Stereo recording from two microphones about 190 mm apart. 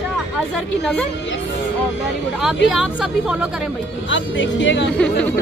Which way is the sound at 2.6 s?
Centre (ahead or behind).